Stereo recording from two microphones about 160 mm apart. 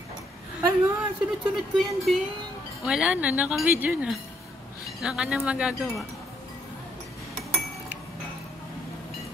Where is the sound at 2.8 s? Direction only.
5° right (ahead or behind).